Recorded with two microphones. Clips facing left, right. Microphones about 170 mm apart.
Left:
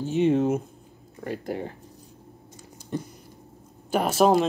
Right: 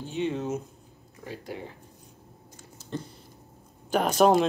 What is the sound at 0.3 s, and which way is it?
Speech, 50° left (ahead or behind).